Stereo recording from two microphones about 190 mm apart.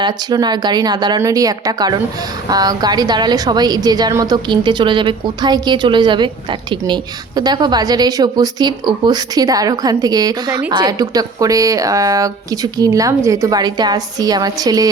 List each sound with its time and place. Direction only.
0.0 s a woman's voice: 20° right (ahead or behind)